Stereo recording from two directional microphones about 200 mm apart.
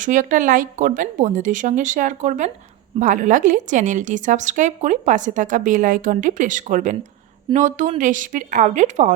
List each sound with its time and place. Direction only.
0.0 s a woman's voice: 40° right (ahead or behind)